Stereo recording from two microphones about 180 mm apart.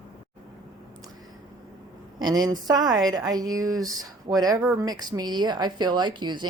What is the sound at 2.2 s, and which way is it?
Speech, 20° right (ahead or behind).